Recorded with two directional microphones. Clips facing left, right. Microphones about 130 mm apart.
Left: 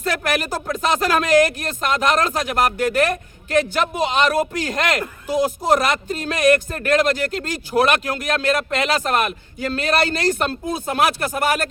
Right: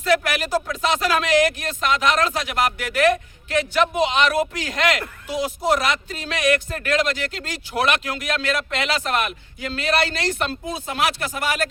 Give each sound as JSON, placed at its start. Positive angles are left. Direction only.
{"t": 0.0, "sound": "speech", "side_deg": 50}